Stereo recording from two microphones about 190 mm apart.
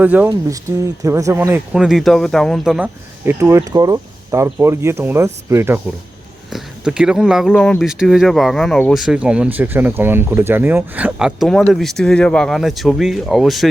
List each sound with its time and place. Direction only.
0.0 s speech: 10° right (ahead or behind)